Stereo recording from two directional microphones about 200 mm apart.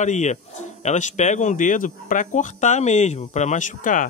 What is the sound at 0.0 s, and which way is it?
Speech, 35° left (ahead or behind).